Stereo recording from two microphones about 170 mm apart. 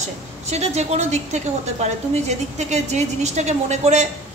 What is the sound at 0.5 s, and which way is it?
A woman's voice, 40° right (ahead or behind).